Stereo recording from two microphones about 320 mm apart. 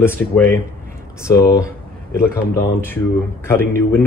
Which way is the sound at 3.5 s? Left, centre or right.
Centre.